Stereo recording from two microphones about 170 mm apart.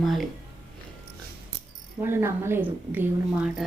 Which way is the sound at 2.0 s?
15° right (ahead or behind).